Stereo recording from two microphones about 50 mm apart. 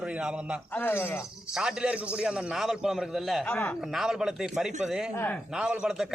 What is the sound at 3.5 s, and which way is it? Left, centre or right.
Speech, left.